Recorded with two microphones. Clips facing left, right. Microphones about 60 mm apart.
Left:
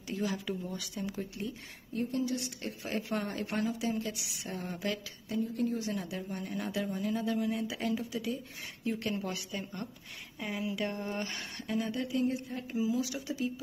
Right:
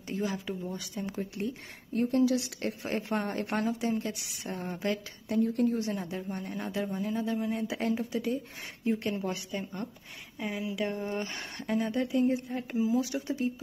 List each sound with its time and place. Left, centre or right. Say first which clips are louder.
0.1 s a woman's voice: right 1 dB; right
2.0 s a woman's voice: right 7 dB; right
2.6 s a woman's voice: right 4 dB; right
5.3 s a woman's voice: right 5 dB; right
5.9 s a woman's voice: right 2 dB; right
7.5 s a woman's voice: right 3 dB; right
8.8 s a woman's voice: right 4 dB; right
10.4 s speech: right 2 dB; centre
11.3 s a woman's voice: right 3 dB; right